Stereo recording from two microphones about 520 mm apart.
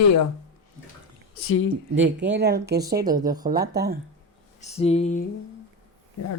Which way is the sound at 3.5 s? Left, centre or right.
Centre.